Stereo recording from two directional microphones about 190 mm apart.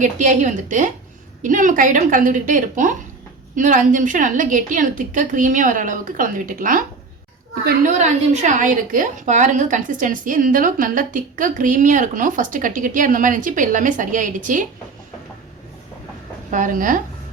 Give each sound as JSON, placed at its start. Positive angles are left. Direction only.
{"t": 0.0, "sound": "a woman's voice", "side_deg": -40}
{"t": 7.9, "sound": "a woman's voice", "side_deg": -35}
{"t": 16.5, "sound": "a woman's voice", "side_deg": -40}